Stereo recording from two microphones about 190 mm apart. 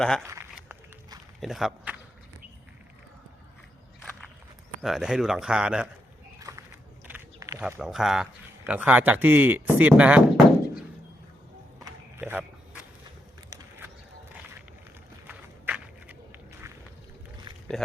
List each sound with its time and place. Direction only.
0.2 s speech: 15° right (ahead or behind)
1.4 s speech: centre (ahead or behind)
4.8 s speech: centre (ahead or behind)
6.5 s a sound: 15° right (ahead or behind)
7.1 s walk: 15° right (ahead or behind)
7.6 s a man's voice: 5° right (ahead or behind)
12.2 s a sound: 5° right (ahead or behind)
15.3 s walk: 10° right (ahead or behind)